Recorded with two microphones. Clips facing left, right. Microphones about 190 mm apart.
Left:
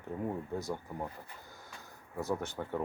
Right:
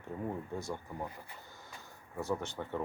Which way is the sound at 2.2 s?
10° left (ahead or behind).